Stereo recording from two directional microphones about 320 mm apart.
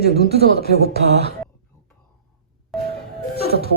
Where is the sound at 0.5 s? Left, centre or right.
Left.